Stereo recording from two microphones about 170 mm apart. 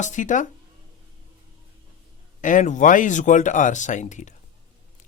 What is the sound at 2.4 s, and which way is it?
Speech, 50° left (ahead or behind).